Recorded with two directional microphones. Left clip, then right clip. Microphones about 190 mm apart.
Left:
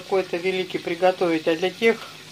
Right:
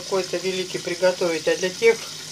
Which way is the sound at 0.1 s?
30° left (ahead or behind).